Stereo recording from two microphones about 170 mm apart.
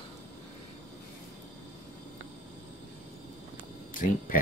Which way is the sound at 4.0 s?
50° left (ahead or behind).